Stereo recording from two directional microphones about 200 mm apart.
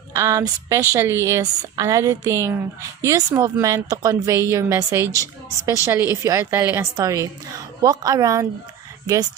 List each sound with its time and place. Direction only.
0.1 s a woman's voice: 15° right (ahead or behind)
4.9 s speech: 15° left (ahead or behind)
5.6 s a woman's voice: 15° right (ahead or behind)